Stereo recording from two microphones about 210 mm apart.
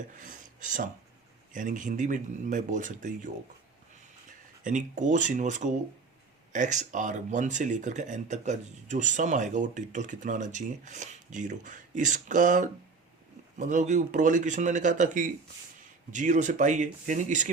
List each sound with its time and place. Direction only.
0.2 s speech: 40° right (ahead or behind)
4.6 s speech: 35° right (ahead or behind)